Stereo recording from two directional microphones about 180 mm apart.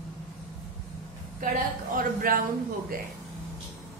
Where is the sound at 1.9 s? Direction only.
50° right (ahead or behind).